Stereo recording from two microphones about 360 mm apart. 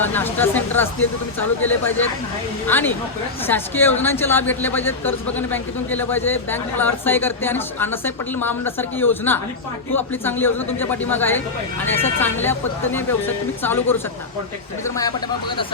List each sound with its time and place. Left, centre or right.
0.0 s speech: centre
11.9 s speech: centre
12.2 s speech: centre